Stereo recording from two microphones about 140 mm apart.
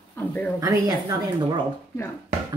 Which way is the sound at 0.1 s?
10° left (ahead or behind).